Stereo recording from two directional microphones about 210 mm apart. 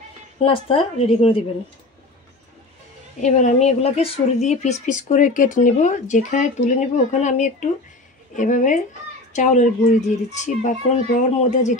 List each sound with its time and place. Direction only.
0.5 s a woman's voice: 25° left (ahead or behind)
3.2 s speech: 35° left (ahead or behind)